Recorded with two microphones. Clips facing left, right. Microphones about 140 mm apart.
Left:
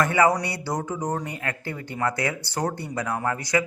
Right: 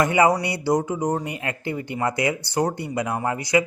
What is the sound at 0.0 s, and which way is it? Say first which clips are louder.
A man's voice: right 2 dB; 15° right (ahead or behind).